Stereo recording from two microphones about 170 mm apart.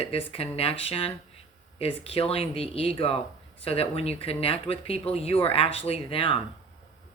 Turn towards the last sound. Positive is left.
turn(degrees=35)  # may be behind; listen again after turning